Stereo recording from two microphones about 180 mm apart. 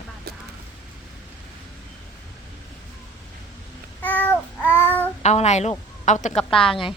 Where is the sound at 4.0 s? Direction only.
10° left (ahead or behind).